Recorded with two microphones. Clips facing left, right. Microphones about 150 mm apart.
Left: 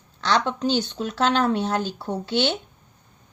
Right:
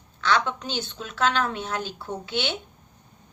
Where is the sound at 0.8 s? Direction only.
35° left (ahead or behind).